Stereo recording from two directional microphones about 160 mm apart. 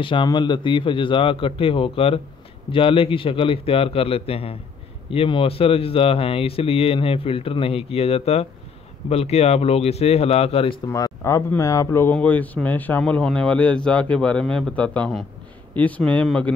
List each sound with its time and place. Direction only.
0.0 s speech: 30° left (ahead or behind)
10.9 s speech: 20° left (ahead or behind); by 16.5 s 5° left (ahead or behind)